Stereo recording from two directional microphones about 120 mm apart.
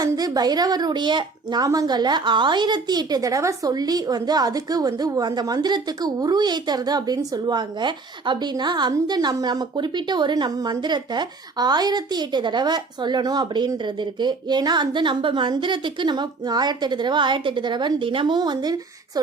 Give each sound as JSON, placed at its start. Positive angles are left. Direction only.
{"t": 0.0, "sound": "a woman's voice", "side_deg": -30}